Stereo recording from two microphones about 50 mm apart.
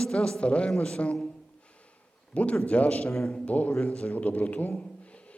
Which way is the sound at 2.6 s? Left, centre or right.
Left.